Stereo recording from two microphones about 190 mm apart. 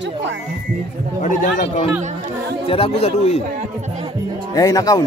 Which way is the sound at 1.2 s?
45° left (ahead or behind).